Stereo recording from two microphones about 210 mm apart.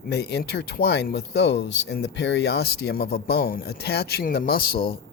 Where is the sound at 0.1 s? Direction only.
55° left (ahead or behind).